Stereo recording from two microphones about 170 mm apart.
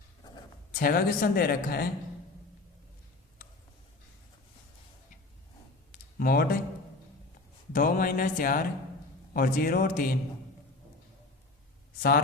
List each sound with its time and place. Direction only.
0.7 s a woman's voice: 60° left (ahead or behind)
5.9 s a sound: 60° left (ahead or behind)
7.7 s a woman's voice: 55° left (ahead or behind)